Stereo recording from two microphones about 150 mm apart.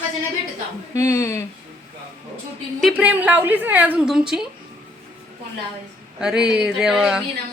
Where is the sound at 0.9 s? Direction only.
20° left (ahead or behind).